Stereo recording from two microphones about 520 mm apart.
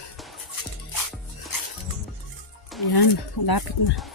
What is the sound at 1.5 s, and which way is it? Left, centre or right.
Music, left.